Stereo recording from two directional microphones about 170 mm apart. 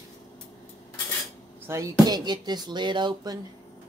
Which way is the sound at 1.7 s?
20° right (ahead or behind).